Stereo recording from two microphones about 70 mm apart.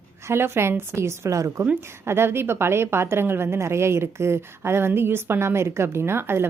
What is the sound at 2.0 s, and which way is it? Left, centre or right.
A woman's voice, right.